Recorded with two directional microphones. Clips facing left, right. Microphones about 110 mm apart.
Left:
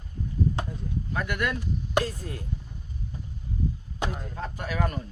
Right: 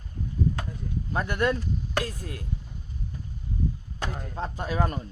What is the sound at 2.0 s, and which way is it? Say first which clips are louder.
Speech: left 5 dB; 25° left (ahead or behind).